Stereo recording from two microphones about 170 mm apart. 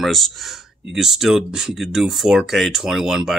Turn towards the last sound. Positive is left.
turn(degrees=-5)  # may be behind; listen again after turning